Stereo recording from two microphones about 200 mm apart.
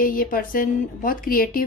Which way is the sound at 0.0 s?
45° left (ahead or behind).